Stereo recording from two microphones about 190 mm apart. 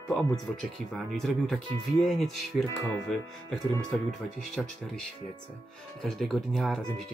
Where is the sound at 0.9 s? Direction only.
Centre (ahead or behind).